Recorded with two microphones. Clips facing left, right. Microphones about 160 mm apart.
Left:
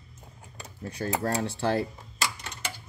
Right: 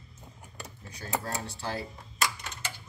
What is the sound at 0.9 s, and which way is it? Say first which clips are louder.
Speech: left 6 dB; 55° left (ahead or behind).